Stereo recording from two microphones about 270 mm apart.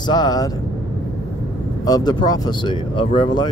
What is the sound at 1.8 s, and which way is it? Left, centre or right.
Speech, centre.